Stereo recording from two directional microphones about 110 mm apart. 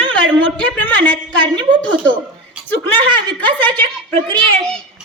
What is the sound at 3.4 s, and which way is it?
Speech, 15° left (ahead or behind).